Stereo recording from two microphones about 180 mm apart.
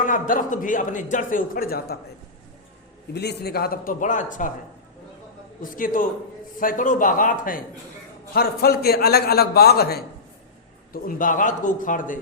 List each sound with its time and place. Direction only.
0.0 s speech: 45° left (ahead or behind)
3.1 s speech: 65° left (ahead or behind); by 4.5 s 45° left (ahead or behind)
5.7 s speech: 50° left (ahead or behind)
8.3 s a man's voice: 60° left (ahead or behind)
10.9 s speech: 50° left (ahead or behind)